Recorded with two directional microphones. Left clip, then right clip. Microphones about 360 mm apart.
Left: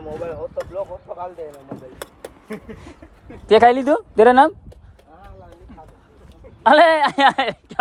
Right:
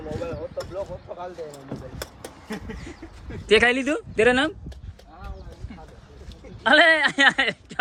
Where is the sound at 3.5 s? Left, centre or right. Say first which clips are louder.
Left 6 dB; centre.